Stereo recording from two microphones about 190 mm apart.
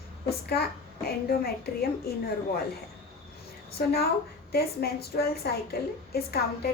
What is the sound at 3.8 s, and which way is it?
Speech, 55° left (ahead or behind).